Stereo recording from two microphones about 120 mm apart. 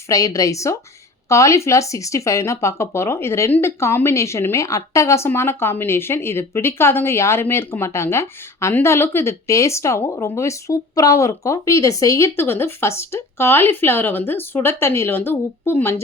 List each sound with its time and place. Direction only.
0.1 s speech: 25° left (ahead or behind)